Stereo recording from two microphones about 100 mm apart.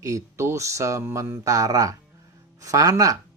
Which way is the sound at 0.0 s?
30° right (ahead or behind).